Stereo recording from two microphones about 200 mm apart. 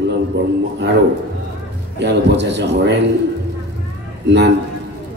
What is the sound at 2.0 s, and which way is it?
A man's voice, 60° right (ahead or behind).